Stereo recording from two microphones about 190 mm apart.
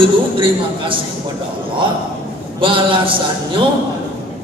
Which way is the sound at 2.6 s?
25° right (ahead or behind).